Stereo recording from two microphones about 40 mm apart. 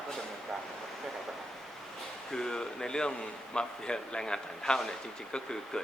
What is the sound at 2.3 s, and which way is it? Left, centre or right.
Speech, centre.